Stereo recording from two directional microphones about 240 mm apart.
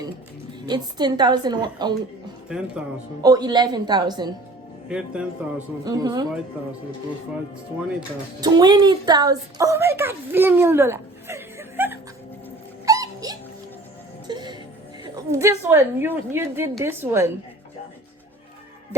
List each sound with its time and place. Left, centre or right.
0.6 s a woman's voice: centre
2.5 s speech: centre
3.2 s a woman's voice: centre
4.9 s speech: centre
5.8 s a woman's voice: centre
8.4 s a woman's voice: centre
12.8 s dog: centre
14.3 s music: centre
15.0 s a woman's voice: centre